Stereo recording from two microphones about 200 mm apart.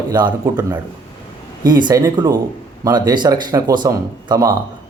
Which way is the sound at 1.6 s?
20° right (ahead or behind).